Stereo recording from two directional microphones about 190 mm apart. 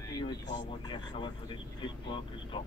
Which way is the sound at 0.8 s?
25° left (ahead or behind).